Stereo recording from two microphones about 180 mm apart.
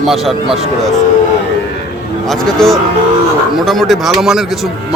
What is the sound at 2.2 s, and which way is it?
A man's voice, centre (ahead or behind).